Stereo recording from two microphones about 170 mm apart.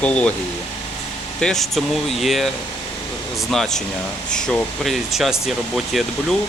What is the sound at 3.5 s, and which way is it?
Speech, centre (ahead or behind).